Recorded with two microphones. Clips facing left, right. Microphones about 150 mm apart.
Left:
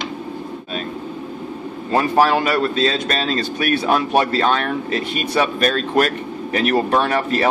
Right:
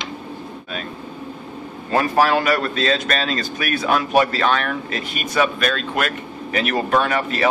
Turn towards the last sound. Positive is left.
turn(degrees=35)  # may be behind; listen again after turning